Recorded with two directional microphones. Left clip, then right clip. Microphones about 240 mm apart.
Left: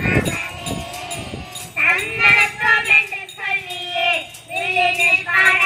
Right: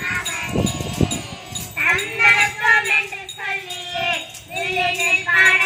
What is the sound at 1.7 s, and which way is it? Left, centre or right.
Music, left.